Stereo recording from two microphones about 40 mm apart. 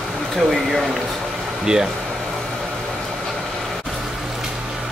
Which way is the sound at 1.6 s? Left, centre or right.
Centre.